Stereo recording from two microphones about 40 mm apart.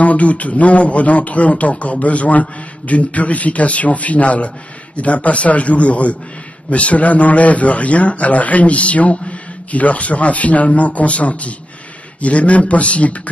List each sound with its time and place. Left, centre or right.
0.0 s a man's voice: left